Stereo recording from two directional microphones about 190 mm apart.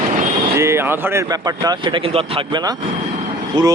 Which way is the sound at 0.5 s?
15° right (ahead or behind).